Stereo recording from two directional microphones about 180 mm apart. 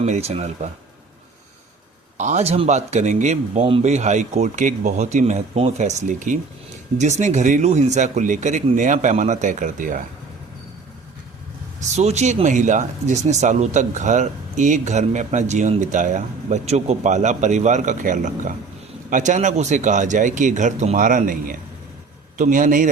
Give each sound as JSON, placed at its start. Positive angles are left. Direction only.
{"t": 0.0, "sound": "speech", "side_deg": -35}
{"t": 2.1, "sound": "speech", "side_deg": -40}
{"t": 11.9, "sound": "speech", "side_deg": -40}